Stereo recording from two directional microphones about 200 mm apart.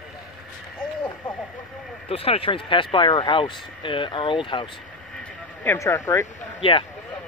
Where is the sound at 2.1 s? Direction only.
30° left (ahead or behind).